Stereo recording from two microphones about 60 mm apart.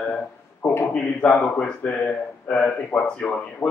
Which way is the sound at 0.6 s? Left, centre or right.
Left.